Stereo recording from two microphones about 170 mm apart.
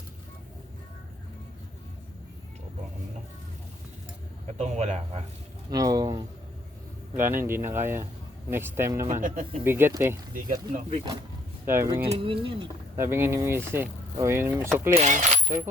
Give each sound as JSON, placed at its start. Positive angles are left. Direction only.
{"t": 4.4, "sound": "speech", "side_deg": -40}
{"t": 5.7, "sound": "speech", "side_deg": -20}
{"t": 9.2, "sound": "speech", "side_deg": -55}
{"t": 9.6, "sound": "speech", "side_deg": -15}
{"t": 10.3, "sound": "speech", "side_deg": -50}
{"t": 11.6, "sound": "speech", "side_deg": -15}
{"t": 12.1, "sound": "speech", "side_deg": -30}
{"t": 13.0, "sound": "speech", "side_deg": -15}
{"t": 14.9, "sound": "speech", "side_deg": -45}
{"t": 15.4, "sound": "coin", "side_deg": -20}